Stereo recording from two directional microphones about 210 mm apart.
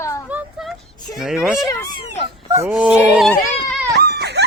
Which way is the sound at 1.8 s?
25° left (ahead or behind).